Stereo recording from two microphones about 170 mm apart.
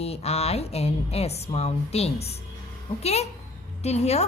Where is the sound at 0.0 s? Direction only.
35° left (ahead or behind).